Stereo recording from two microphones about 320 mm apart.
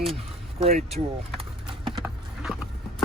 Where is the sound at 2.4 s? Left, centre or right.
Centre.